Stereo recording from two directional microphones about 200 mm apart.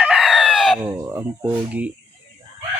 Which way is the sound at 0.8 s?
15° right (ahead or behind).